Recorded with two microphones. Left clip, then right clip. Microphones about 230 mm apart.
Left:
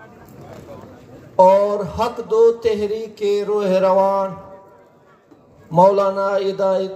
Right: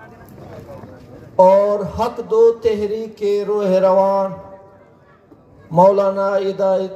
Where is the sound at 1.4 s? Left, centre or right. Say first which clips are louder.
Right 1 dB; left.